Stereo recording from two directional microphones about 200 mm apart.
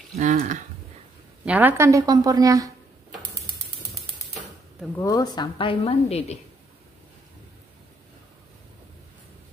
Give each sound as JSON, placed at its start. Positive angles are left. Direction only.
{"t": 0.1, "sound": "speech", "side_deg": -45}
{"t": 1.4, "sound": "speech", "side_deg": -10}
{"t": 4.9, "sound": "a woman's voice", "side_deg": 15}